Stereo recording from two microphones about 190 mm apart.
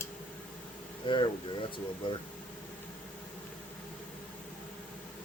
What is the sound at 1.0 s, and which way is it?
Speech, 25° left (ahead or behind).